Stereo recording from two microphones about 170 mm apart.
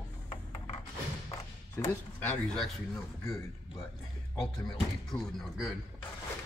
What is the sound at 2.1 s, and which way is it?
Speech, 5° left (ahead or behind).